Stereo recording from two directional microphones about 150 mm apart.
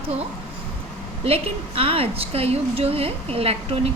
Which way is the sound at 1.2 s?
40° right (ahead or behind).